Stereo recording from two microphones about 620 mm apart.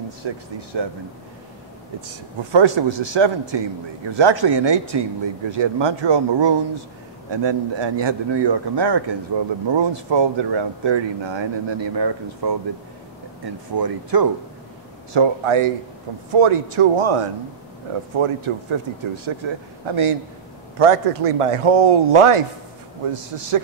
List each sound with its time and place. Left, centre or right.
0.7 s a man's voice: right
2.5 s a man's voice: right
13.7 s speech: right
15.1 s a man's voice: right